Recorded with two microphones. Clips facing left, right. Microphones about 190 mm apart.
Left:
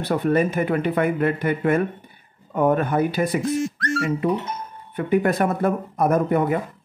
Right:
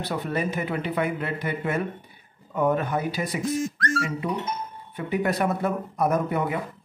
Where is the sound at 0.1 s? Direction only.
55° left (ahead or behind).